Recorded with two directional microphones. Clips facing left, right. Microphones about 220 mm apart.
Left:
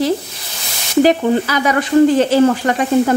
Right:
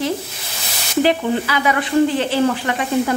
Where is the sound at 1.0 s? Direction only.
40° left (ahead or behind).